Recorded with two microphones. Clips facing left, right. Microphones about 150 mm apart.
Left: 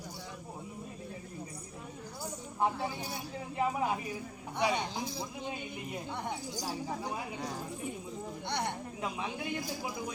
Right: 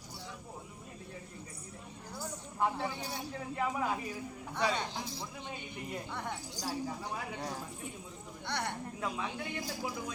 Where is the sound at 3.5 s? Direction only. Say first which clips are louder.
Left 3 dB; 20° left (ahead or behind).